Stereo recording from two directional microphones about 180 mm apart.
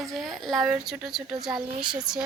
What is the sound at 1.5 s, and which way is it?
Speech, 25° right (ahead or behind).